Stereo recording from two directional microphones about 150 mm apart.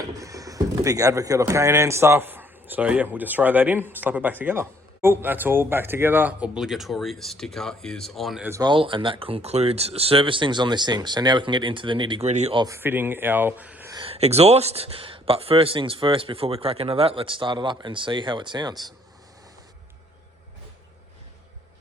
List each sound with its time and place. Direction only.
0.2 s speech: 20° right (ahead or behind); by 8.4 s centre (ahead or behind)
8.4 s speech: 20° right (ahead or behind)
8.7 s speech: 35° right (ahead or behind)
12.2 s speech: 45° right (ahead or behind)
12.5 s speech: 20° right (ahead or behind)
13.9 s speech: 35° right (ahead or behind)